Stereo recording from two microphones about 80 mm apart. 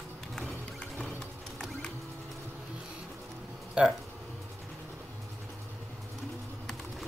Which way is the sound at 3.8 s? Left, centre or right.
Centre.